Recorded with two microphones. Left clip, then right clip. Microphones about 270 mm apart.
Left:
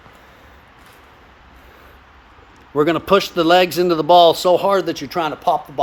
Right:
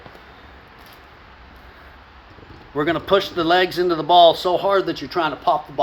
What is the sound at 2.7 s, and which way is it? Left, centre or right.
Speech, left.